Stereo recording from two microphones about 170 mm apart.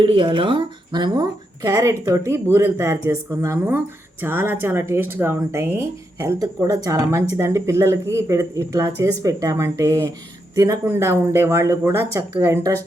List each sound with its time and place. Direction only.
0.0 s speech: 30° right (ahead or behind)